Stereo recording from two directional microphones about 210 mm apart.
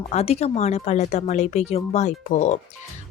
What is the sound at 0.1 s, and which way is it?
Speech, 30° left (ahead or behind).